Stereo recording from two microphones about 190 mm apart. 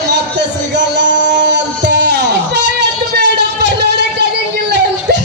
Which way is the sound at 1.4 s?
65° right (ahead or behind).